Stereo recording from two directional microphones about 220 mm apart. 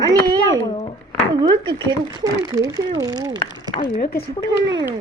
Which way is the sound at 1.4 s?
20° right (ahead or behind).